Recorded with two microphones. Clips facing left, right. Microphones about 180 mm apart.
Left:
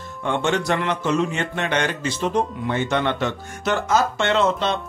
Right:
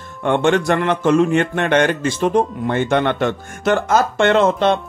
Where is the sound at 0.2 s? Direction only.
55° right (ahead or behind).